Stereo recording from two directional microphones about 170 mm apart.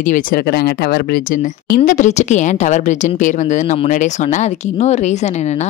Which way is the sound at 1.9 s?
45° left (ahead or behind).